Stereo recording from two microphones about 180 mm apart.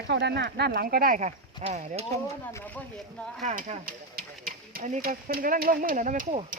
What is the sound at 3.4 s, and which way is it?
Speech, 45° right (ahead or behind).